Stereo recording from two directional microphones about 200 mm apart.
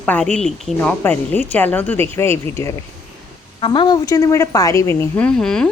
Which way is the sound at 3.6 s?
25° left (ahead or behind).